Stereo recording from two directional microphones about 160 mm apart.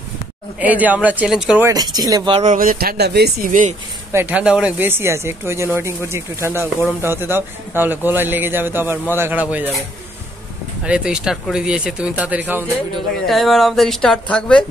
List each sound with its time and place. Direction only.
0.6 s speech: 10° right (ahead or behind)
1.7 s speech: 25° right (ahead or behind)
2.3 s speech: 50° right (ahead or behind)
4.1 s speech: 10° right (ahead or behind)
13.3 s speech: centre (ahead or behind)